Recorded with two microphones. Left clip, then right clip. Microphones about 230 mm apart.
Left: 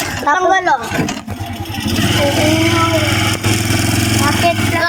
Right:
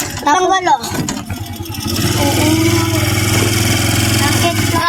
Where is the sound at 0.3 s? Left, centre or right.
Right.